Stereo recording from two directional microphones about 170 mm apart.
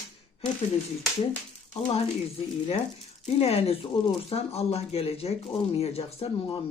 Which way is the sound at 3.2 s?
35° left (ahead or behind).